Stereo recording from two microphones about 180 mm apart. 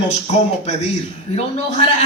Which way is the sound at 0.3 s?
40° left (ahead or behind).